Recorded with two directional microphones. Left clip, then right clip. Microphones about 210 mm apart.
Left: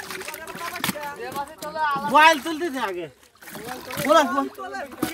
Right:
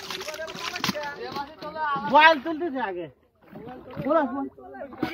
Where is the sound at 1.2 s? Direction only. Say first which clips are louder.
Left 3 dB; 40° left (ahead or behind).